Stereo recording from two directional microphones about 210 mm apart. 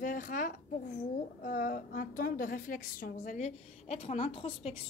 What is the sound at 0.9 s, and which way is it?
A woman's voice, 40° left (ahead or behind).